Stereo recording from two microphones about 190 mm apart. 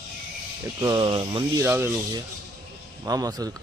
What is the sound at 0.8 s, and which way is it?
Speech, 25° right (ahead or behind).